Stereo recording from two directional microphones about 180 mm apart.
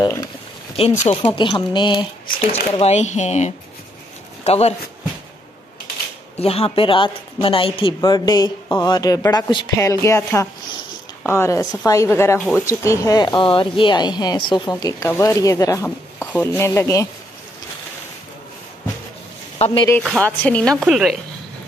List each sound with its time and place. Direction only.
0.7 s speech: 35° left (ahead or behind)
2.8 s speech: 40° left (ahead or behind)
6.4 s speech: 35° left (ahead or behind); by 17.1 s 15° left (ahead or behind)
19.6 s speech: 30° left (ahead or behind)
20.0 s speech: 5° left (ahead or behind)